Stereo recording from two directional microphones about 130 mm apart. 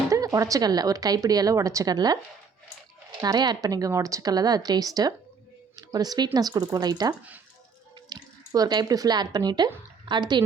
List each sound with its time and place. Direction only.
0.1 s a woman's voice: 25° right (ahead or behind)
3.2 s a woman's voice: 30° right (ahead or behind)